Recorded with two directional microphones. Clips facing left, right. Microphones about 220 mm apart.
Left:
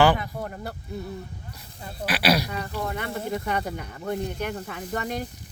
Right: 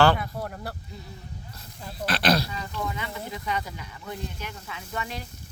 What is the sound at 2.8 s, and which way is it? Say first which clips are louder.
Speech: left 3 dB; 55° left (ahead or behind).